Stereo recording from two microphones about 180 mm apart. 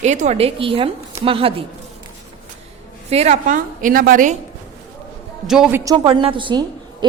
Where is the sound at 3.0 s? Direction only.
40° right (ahead or behind).